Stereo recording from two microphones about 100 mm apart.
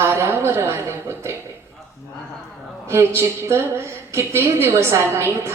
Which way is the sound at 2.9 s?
25° right (ahead or behind).